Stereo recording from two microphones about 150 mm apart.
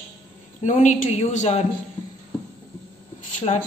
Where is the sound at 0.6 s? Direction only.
55° left (ahead or behind).